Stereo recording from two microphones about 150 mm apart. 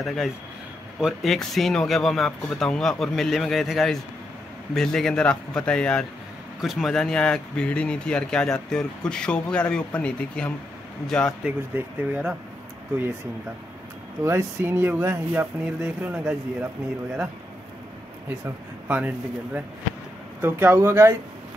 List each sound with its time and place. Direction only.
0.0 s speech: centre (ahead or behind)
11.4 s speech: 10° right (ahead or behind)
14.2 s speech: 15° right (ahead or behind)
18.9 s speech: 10° right (ahead or behind)